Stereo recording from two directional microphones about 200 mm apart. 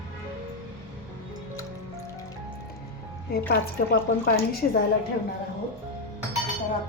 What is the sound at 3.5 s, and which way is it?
A woman's voice, 50° left (ahead or behind).